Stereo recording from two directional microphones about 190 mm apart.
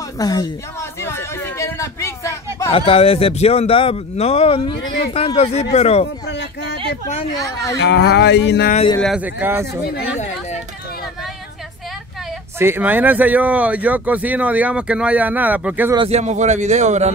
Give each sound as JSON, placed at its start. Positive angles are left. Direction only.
{"t": 0.2, "sound": "a sound", "side_deg": 20}
{"t": 2.7, "sound": "speech", "side_deg": 30}
{"t": 7.3, "sound": "speech", "side_deg": 15}
{"t": 7.8, "sound": "speech", "side_deg": 65}
{"t": 9.0, "sound": "speech", "side_deg": -5}
{"t": 10.1, "sound": "chatter", "side_deg": 35}
{"t": 12.5, "sound": "speech", "side_deg": -10}
{"t": 16.0, "sound": "speech", "side_deg": -35}